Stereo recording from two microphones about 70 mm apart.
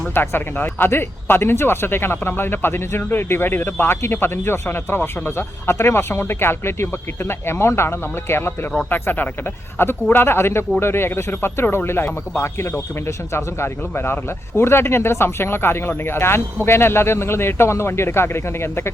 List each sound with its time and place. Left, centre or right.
0.1 s speech: left